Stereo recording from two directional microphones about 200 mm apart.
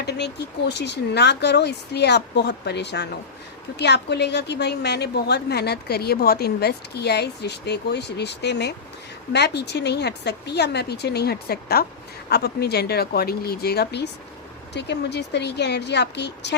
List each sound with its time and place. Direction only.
0.0 s a woman's voice: 55° left (ahead or behind)